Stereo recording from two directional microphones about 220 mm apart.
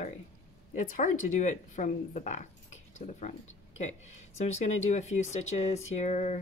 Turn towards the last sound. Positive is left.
turn(degrees=30)  # may be behind; listen again after turning